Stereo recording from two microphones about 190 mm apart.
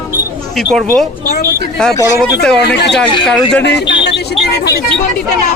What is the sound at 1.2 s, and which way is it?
Speech, 55° left (ahead or behind).